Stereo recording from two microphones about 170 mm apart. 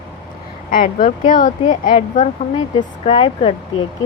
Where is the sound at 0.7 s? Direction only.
55° left (ahead or behind).